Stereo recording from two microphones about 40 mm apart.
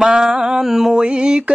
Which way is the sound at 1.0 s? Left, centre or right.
Right.